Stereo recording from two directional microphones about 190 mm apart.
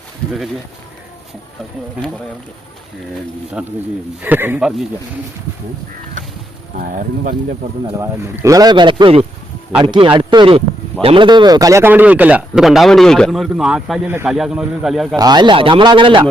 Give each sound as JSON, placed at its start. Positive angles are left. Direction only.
{"t": 3.6, "sound": "speech", "side_deg": -5}
{"t": 6.7, "sound": "speech", "side_deg": -50}
{"t": 8.0, "sound": "speech", "side_deg": -15}
{"t": 15.1, "sound": "speech", "side_deg": -20}